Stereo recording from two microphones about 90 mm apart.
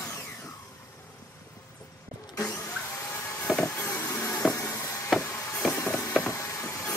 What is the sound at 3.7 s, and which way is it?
Vehicle, 30° left (ahead or behind).